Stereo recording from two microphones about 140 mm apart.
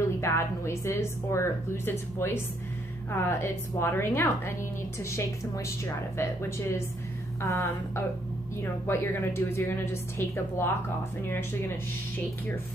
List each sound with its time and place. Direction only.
0.2 s a woman's voice: 20° left (ahead or behind)
7.4 s a woman's voice: 20° left (ahead or behind)